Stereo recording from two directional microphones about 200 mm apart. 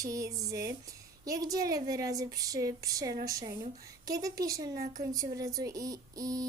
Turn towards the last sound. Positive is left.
turn(degrees=-15)  # may be behind; listen again after turning